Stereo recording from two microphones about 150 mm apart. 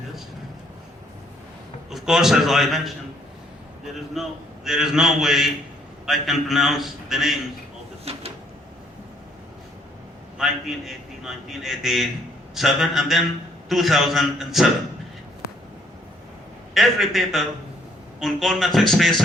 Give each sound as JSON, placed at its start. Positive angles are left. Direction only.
{"t": 1.9, "sound": "a man's voice", "side_deg": 0}
{"t": 4.1, "sound": "a man's voice", "side_deg": 0}
{"t": 8.1, "sound": "a sound", "side_deg": -40}
{"t": 10.3, "sound": "a man's voice", "side_deg": -5}
{"t": 16.7, "sound": "a man's voice", "side_deg": 0}